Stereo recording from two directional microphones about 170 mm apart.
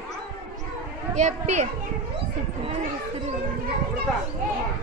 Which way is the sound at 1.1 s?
45° right (ahead or behind).